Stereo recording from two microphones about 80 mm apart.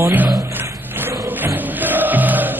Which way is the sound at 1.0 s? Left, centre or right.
Right.